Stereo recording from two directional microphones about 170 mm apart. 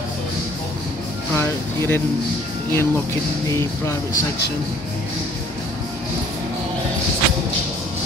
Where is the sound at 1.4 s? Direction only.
15° left (ahead or behind).